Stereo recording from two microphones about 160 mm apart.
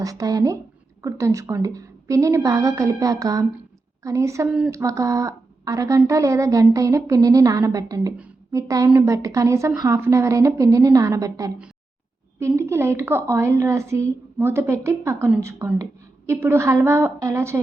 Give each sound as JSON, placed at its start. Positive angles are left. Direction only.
{"t": 0.0, "sound": "a woman's voice", "side_deg": -20}